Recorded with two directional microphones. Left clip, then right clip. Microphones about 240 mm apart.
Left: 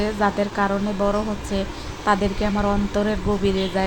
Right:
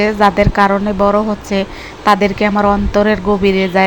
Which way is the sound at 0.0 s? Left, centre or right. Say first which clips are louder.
Right 10 dB; right.